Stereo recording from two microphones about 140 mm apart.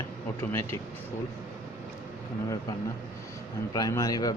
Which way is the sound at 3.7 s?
25° left (ahead or behind).